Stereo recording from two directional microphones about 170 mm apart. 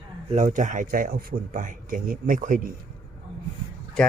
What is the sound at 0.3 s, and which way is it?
Speech, 45° right (ahead or behind).